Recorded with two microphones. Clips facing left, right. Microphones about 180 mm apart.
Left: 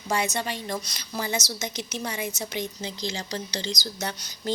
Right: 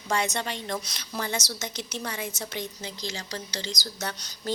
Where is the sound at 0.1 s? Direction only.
5° left (ahead or behind).